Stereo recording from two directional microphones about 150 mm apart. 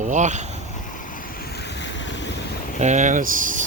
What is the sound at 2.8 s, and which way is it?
Speech, 55° right (ahead or behind).